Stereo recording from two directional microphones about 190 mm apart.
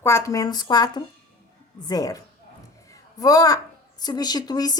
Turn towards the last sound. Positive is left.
turn(degrees=20)  # may be behind; listen again after turning